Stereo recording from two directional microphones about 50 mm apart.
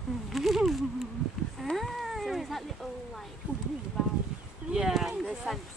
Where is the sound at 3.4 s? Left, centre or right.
Right.